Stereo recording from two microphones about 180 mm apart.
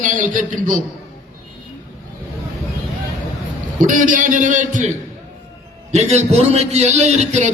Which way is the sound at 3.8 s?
45° right (ahead or behind).